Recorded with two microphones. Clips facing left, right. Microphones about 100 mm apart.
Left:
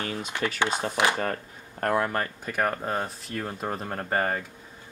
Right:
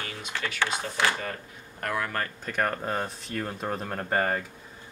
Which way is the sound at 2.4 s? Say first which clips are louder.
Right 1 dB; 5° left (ahead or behind).